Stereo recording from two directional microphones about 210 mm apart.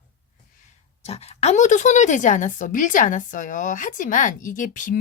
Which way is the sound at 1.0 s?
30° left (ahead or behind).